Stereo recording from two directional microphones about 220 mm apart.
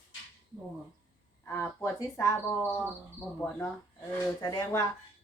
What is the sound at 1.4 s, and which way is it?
Speech, 10° left (ahead or behind).